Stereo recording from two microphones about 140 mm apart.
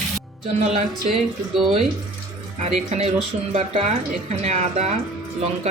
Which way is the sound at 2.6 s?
50° right (ahead or behind).